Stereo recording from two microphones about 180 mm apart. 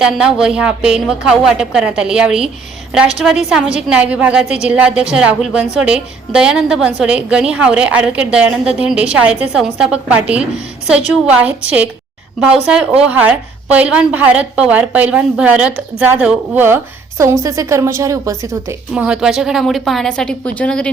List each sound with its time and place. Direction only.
0.0 s a woman's voice: 5° right (ahead or behind)
4.4 s a woman's voice: 35° left (ahead or behind)
4.7 s a woman's voice: 5° right (ahead or behind)